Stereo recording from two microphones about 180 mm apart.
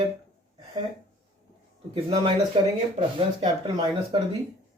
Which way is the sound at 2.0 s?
30° right (ahead or behind).